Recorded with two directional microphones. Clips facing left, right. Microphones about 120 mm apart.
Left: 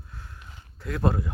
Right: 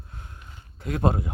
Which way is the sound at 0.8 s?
20° right (ahead or behind).